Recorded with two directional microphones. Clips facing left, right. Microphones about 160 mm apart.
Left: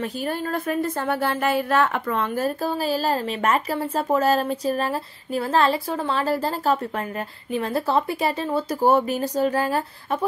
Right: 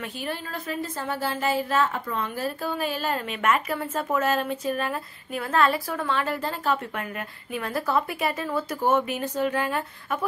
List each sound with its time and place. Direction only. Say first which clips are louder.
0.0 s speech: left 6 dB; 45° left (ahead or behind)